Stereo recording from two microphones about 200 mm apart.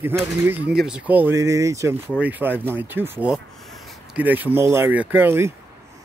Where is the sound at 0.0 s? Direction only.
10° right (ahead or behind).